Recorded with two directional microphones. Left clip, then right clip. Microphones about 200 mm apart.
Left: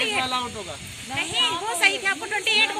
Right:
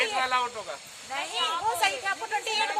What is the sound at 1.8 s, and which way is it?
Speech, 30° right (ahead or behind).